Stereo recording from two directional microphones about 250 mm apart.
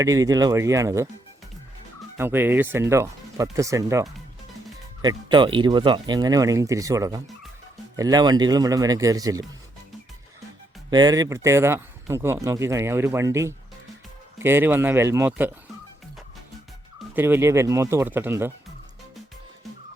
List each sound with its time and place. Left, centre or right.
0.0 s speech: centre
2.1 s speech: centre
5.0 s speech: centre
10.9 s speech: centre
17.2 s speech: centre